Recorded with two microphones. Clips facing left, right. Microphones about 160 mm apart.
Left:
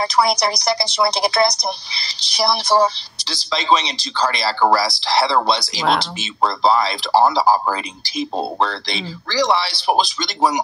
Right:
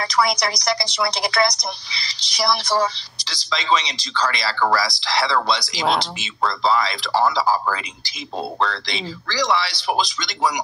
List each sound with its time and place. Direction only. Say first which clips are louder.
0.0 s a woman's voice: left 3 dB; 30° left (ahead or behind)
9.3 s a woman's voice: left 3 dB; 30° left (ahead or behind)